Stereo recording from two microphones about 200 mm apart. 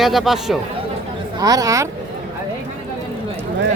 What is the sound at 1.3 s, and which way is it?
Speech, 15° right (ahead or behind).